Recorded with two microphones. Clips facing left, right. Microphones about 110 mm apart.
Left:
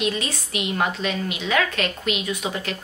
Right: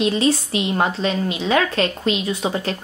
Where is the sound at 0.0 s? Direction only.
30° right (ahead or behind).